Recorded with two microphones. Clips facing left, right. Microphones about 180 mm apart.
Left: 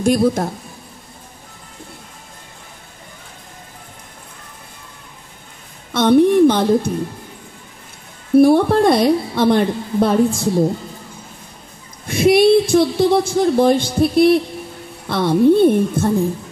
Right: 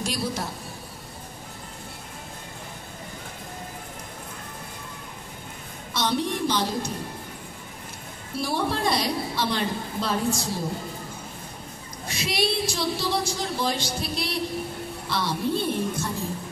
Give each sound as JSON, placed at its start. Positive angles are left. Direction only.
{"t": 0.0, "sound": "speech", "side_deg": 50}
{"t": 5.9, "sound": "a woman's voice", "side_deg": 55}
{"t": 8.4, "sound": "a woman's voice", "side_deg": 55}
{"t": 12.1, "sound": "a woman's voice", "side_deg": 55}